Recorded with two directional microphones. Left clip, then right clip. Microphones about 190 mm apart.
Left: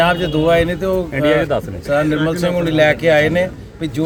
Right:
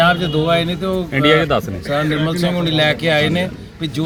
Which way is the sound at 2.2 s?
5° left (ahead or behind).